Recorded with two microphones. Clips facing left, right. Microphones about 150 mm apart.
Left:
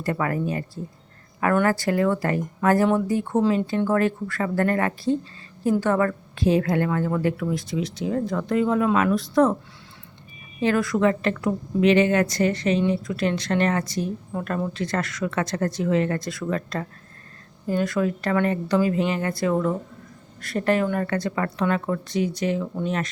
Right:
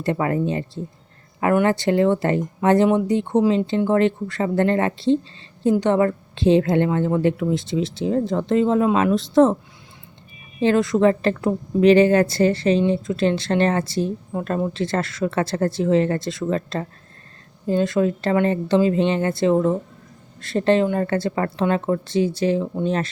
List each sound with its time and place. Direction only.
0.0 s a woman's voice: 25° right (ahead or behind)
1.6 s a woman's voice: 25° right (ahead or behind)
10.6 s a woman's voice: 25° right (ahead or behind)